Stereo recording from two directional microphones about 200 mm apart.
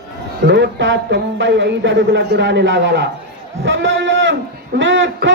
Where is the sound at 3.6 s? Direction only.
65° right (ahead or behind).